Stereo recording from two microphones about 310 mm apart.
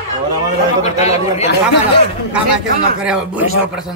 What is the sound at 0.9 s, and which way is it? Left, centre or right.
Speech, left.